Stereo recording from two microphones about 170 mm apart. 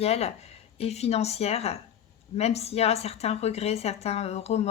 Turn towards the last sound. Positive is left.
turn(degrees=40)  # may be behind; listen again after turning